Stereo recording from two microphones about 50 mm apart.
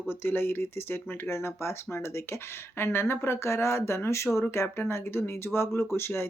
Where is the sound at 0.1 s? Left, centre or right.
Left.